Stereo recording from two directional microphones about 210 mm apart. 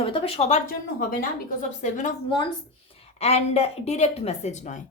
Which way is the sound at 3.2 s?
30° left (ahead or behind).